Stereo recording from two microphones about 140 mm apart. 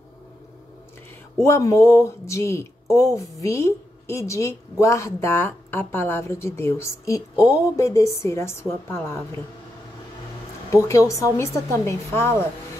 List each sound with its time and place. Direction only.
1.4 s a woman's voice: 20° left (ahead or behind)
10.7 s speech: 20° left (ahead or behind)